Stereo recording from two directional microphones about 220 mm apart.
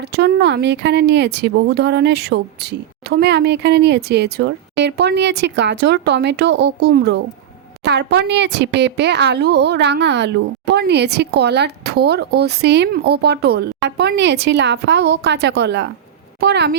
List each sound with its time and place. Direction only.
0.0 s speech: 50° right (ahead or behind)